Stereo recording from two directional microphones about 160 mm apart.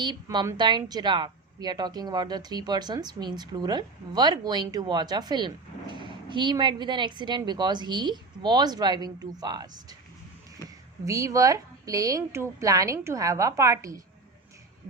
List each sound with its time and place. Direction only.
0.0 s speech: 30° right (ahead or behind)
11.0 s speech: 20° right (ahead or behind)